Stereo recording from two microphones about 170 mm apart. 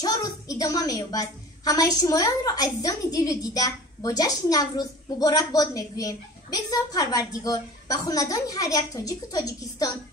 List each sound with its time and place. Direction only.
0.0 s a woman's voice: 20° left (ahead or behind)